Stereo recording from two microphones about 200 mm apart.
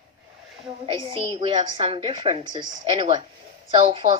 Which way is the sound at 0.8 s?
25° right (ahead or behind).